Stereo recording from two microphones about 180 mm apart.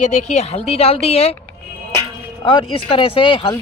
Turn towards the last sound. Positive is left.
turn(degrees=30)  # may be behind; listen again after turning